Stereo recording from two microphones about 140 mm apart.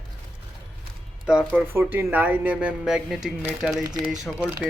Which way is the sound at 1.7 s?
15° right (ahead or behind).